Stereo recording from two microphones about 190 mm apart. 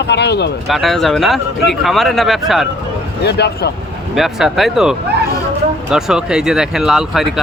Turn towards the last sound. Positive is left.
turn(degrees=0)  # may be behind; listen again after turning